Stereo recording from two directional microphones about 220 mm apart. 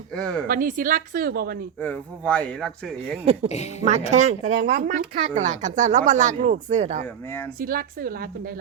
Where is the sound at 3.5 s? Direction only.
30° left (ahead or behind).